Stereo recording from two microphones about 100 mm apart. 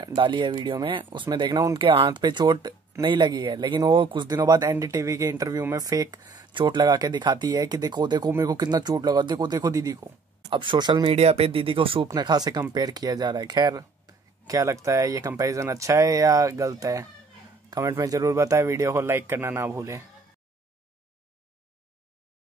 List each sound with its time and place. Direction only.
0.0 s speech: 55° right (ahead or behind); by 10.0 s 35° right (ahead or behind)
10.5 s speech: 55° right (ahead or behind)
11.1 s speech: 85° right; by 12.1 s 60° right (ahead or behind)
12.1 s speech: 40° right (ahead or behind)